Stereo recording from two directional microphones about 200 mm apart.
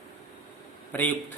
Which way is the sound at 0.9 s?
10° left (ahead or behind).